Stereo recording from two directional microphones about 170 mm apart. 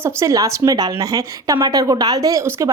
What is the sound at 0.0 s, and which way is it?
A woman's voice, 20° right (ahead or behind).